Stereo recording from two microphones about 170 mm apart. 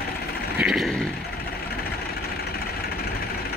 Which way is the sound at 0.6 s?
Centre (ahead or behind).